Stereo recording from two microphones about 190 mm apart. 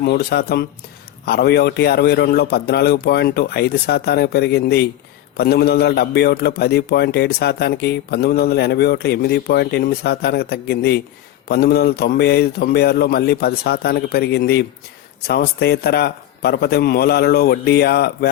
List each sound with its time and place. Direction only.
0.0 s a man's voice: 55° left (ahead or behind)